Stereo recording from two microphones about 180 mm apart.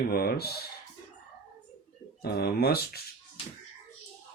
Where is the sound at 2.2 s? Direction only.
60° left (ahead or behind).